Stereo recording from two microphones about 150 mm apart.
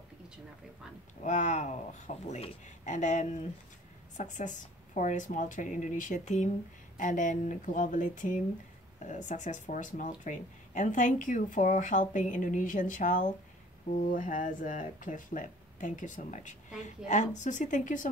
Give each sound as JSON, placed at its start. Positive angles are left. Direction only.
{"t": 1.2, "sound": "speech", "side_deg": 55}